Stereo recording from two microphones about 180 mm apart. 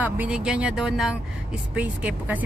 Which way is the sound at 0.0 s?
5° right (ahead or behind).